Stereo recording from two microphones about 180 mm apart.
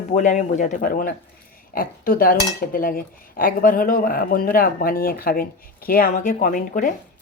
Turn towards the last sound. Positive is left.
turn(degrees=50)  # may be behind; listen again after turning